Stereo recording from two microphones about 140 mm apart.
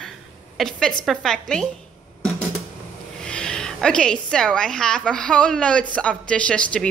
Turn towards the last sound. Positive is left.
turn(degrees=5)  # may be behind; listen again after turning